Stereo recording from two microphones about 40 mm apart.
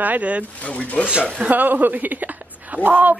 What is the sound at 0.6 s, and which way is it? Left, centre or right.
Speech, left.